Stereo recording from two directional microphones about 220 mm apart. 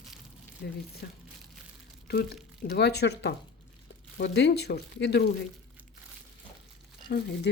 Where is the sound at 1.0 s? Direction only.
45° left (ahead or behind).